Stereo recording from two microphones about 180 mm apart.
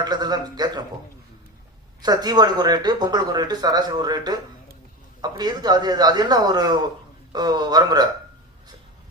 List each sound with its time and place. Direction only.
0.0 s speech: 25° right (ahead or behind)
2.0 s speech: 20° right (ahead or behind)